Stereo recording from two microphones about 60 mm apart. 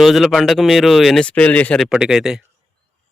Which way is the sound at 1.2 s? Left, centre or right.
Left.